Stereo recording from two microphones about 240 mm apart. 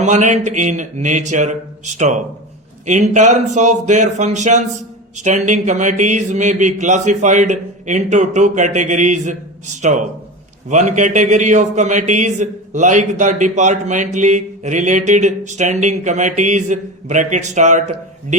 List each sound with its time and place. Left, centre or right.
0.0 s a man's voice: right